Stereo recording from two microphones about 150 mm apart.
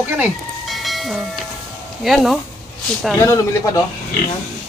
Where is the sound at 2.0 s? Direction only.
Centre (ahead or behind).